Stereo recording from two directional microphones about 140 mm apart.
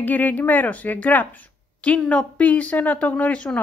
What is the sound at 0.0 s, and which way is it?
A woman's voice, 10° left (ahead or behind).